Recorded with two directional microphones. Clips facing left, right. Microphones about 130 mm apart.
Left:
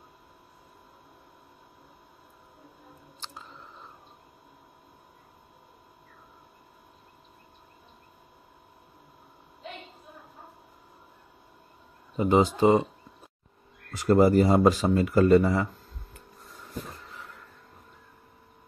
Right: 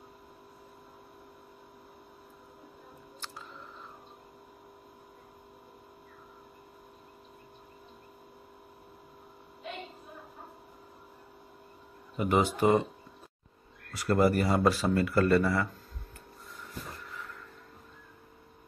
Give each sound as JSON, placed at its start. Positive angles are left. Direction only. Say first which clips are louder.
{"t": 12.2, "sound": "speech", "louder": "left 5 dB", "side_deg": 25}
{"t": 13.9, "sound": "speech", "louder": "left 6 dB", "side_deg": 20}